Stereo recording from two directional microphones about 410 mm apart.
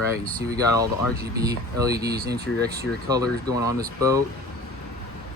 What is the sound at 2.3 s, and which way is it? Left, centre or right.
Speech, right.